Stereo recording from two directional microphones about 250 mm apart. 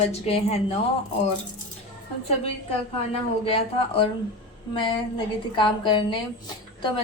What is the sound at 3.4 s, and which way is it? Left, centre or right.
A woman's voice, left.